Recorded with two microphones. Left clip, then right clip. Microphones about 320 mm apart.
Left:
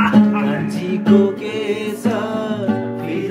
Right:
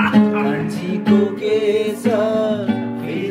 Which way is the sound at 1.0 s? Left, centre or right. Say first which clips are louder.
Left 1 dB; centre.